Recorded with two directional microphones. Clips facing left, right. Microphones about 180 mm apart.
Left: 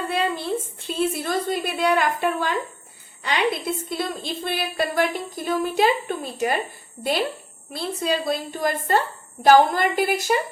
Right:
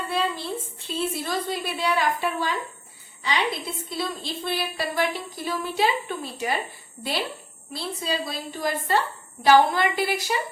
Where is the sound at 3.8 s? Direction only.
55° left (ahead or behind).